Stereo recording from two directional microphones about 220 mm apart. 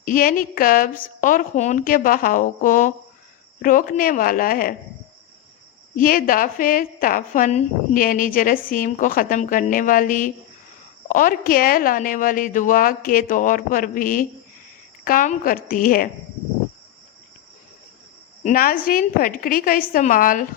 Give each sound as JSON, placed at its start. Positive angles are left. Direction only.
{"t": 0.0, "sound": "a woman's voice", "side_deg": 40}
{"t": 6.0, "sound": "a woman's voice", "side_deg": 40}
{"t": 18.4, "sound": "a woman's voice", "side_deg": 40}